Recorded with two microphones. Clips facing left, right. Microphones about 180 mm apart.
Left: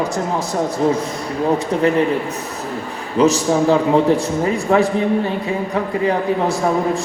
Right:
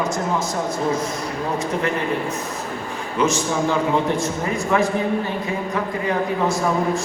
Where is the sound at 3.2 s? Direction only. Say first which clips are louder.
Left 6 dB; 35° left (ahead or behind).